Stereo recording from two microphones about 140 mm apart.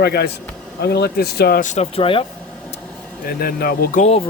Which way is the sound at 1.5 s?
65° left (ahead or behind).